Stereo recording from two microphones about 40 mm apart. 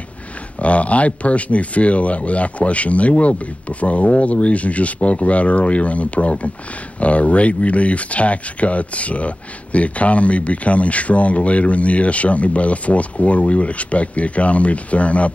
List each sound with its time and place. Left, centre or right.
0.6 s speech: left